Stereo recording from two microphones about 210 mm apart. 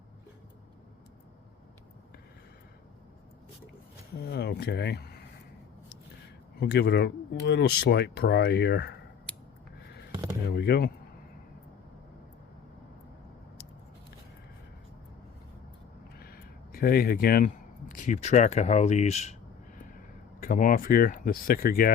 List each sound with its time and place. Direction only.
4.2 s speech: 50° left (ahead or behind)
6.6 s speech: 50° left (ahead or behind)
10.5 s speech: 50° left (ahead or behind)
16.1 s speech: 45° left (ahead or behind)